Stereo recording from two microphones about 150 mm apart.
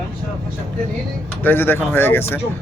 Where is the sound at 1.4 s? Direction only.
15° left (ahead or behind).